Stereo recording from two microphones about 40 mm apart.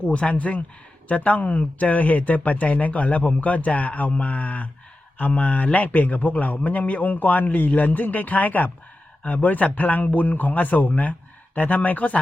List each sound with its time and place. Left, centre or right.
0.0 s a man's voice: left